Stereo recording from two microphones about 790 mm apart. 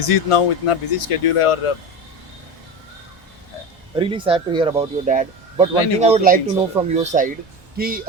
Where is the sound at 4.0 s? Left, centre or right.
Centre.